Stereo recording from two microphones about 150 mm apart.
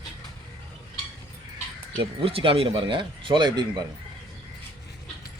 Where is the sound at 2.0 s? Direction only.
35° right (ahead or behind).